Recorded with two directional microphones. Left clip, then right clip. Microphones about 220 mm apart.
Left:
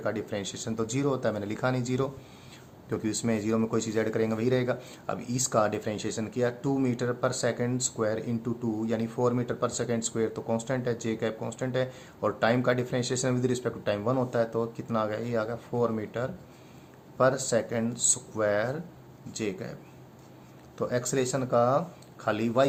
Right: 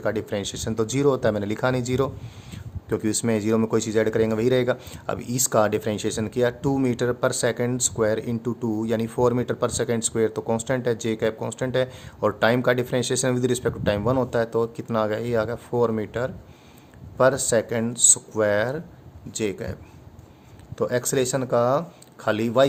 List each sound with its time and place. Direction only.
0.0 s speech: 50° right (ahead or behind)
20.7 s speech: 50° right (ahead or behind)